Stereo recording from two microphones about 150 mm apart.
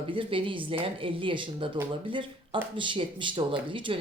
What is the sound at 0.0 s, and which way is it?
Speech, 35° right (ahead or behind).